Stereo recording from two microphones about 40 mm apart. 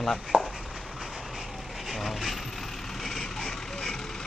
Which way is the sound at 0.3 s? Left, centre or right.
Right.